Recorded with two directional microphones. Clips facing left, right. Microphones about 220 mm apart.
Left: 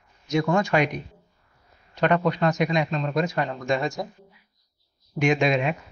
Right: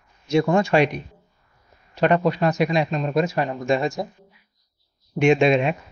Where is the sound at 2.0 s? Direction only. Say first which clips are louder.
Right 3 dB; 25° right (ahead or behind).